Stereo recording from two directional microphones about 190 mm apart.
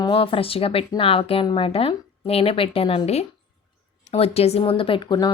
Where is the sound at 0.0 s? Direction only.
30° left (ahead or behind).